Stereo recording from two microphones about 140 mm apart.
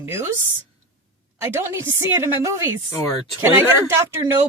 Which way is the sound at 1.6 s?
20° right (ahead or behind).